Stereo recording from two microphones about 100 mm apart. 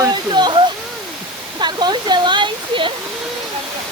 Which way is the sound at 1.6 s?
50° right (ahead or behind).